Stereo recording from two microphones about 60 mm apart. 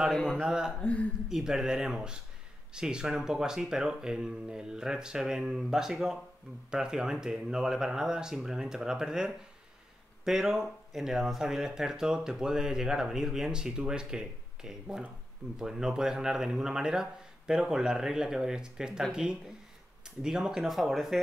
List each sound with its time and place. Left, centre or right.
0.4 s speech: centre
0.7 s speech: left
1.3 s speech: centre
20.2 s speech: centre